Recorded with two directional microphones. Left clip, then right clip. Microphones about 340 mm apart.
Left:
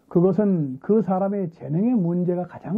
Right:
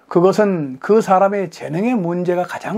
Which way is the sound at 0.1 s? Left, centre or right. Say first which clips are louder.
Right 7 dB; centre.